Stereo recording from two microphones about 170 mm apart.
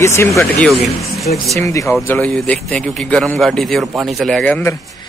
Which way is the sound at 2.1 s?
5° left (ahead or behind).